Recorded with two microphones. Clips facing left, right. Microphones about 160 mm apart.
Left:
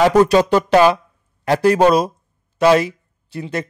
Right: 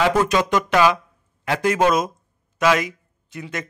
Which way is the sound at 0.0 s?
35° left (ahead or behind).